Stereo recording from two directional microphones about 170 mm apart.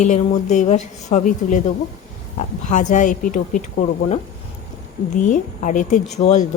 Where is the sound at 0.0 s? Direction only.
45° left (ahead or behind).